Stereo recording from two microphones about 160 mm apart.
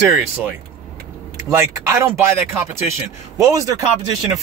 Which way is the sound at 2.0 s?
15° right (ahead or behind).